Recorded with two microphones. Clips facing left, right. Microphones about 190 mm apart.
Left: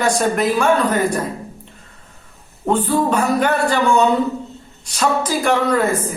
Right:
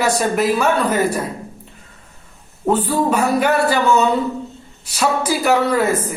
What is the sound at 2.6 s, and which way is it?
Speech, 5° right (ahead or behind).